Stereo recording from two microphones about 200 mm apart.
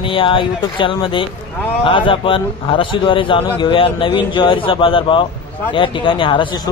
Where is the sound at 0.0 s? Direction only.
25° left (ahead or behind).